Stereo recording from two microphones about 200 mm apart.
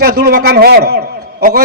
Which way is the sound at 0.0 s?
50° right (ahead or behind).